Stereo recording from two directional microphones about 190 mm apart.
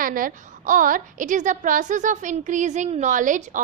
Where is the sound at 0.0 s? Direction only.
45° right (ahead or behind).